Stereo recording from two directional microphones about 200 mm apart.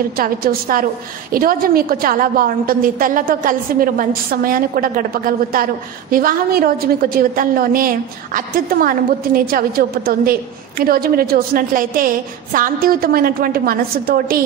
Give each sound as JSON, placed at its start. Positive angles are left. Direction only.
{"t": 0.2, "sound": "a woman's voice", "side_deg": -45}